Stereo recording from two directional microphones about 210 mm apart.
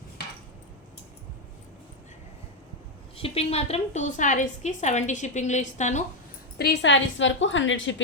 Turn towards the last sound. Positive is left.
turn(degrees=65)  # may be behind; listen again after turning